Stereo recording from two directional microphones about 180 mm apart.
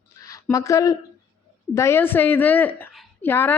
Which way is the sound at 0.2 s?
20° left (ahead or behind).